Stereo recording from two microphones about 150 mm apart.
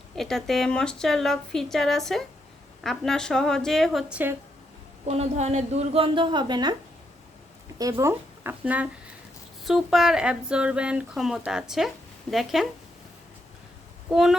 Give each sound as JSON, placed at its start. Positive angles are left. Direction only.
{"t": 0.2, "sound": "speech", "side_deg": 0}
{"t": 5.0, "sound": "a woman's voice", "side_deg": -45}
{"t": 7.8, "sound": "speech", "side_deg": -20}
{"t": 14.1, "sound": "speech", "side_deg": -5}